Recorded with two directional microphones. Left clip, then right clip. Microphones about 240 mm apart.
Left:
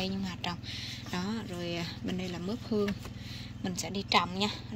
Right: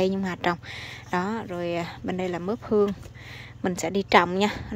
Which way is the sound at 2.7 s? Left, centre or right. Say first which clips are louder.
Right 10 dB; right.